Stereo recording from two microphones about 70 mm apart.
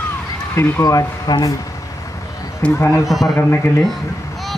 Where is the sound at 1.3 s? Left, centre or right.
Left.